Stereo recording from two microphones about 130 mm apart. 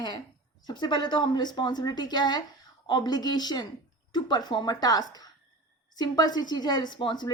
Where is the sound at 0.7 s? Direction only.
35° left (ahead or behind).